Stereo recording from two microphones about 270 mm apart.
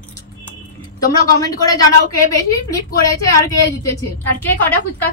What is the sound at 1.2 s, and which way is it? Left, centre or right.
A woman's voice, centre.